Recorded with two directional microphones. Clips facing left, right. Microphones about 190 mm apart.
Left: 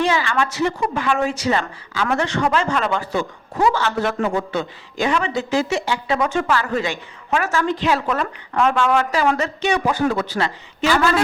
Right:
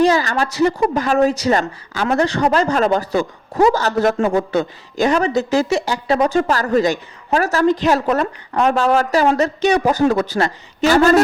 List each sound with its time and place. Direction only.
0.0 s a woman's voice: 40° right (ahead or behind)